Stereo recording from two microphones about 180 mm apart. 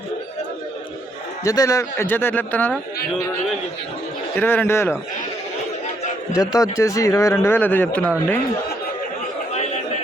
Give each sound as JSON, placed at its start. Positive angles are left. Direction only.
{"t": 1.5, "sound": "a man's voice", "side_deg": 20}
{"t": 4.4, "sound": "a man's voice", "side_deg": 10}
{"t": 6.3, "sound": "a man's voice", "side_deg": 20}